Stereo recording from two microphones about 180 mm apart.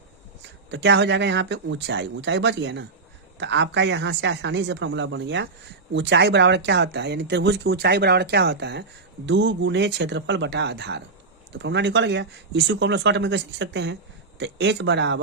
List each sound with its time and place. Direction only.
0.7 s a woman's voice: 75° right (ahead or behind)
9.2 s speech: 80° right